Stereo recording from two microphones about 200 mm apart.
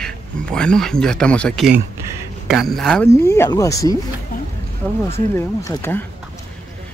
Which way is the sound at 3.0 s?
15° left (ahead or behind).